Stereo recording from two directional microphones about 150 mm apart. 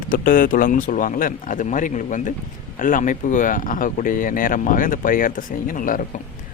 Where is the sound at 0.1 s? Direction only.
70° left (ahead or behind).